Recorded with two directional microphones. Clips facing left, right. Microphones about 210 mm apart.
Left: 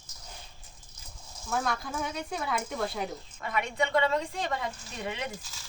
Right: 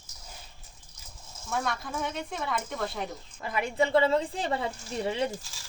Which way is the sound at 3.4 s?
30° right (ahead or behind).